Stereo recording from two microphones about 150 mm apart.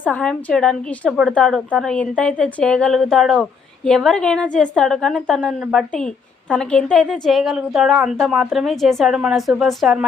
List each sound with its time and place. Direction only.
0.0 s a woman's voice: 10° left (ahead or behind)